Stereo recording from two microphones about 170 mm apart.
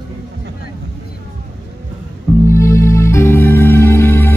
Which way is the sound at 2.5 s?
15° left (ahead or behind).